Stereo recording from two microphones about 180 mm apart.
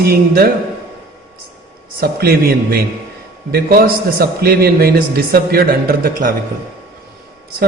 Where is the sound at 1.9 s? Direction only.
55° right (ahead or behind).